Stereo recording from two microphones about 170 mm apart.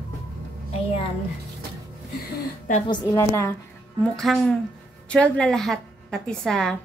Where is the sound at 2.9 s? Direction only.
15° left (ahead or behind).